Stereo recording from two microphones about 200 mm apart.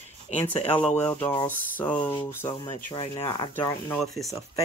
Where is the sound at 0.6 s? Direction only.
25° left (ahead or behind).